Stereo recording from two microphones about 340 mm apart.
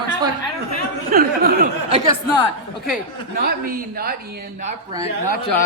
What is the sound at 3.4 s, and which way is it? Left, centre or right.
A man's voice, right.